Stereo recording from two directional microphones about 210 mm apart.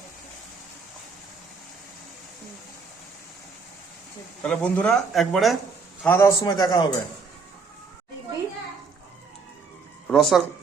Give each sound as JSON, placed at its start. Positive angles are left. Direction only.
{"t": 4.4, "sound": "speech", "side_deg": 5}
{"t": 6.0, "sound": "a man's voice", "side_deg": 10}
{"t": 10.1, "sound": "speech", "side_deg": 0}